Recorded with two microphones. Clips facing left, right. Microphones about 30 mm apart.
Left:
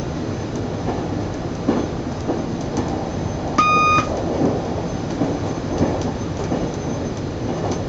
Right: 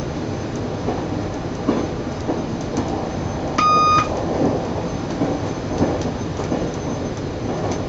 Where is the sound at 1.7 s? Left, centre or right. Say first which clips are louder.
Even; centre.